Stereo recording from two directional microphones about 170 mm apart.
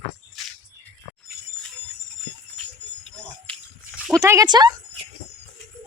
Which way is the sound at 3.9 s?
5° right (ahead or behind).